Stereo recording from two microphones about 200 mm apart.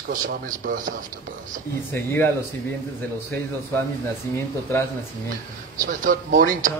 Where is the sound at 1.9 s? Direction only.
15° left (ahead or behind).